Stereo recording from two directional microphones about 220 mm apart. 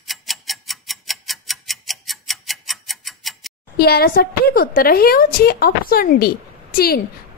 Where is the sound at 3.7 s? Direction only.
45° left (ahead or behind).